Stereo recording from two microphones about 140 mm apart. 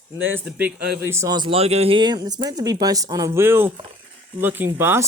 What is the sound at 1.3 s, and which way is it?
Speech, 40° right (ahead or behind).